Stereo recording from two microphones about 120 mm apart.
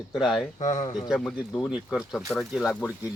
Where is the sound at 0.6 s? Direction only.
90° left.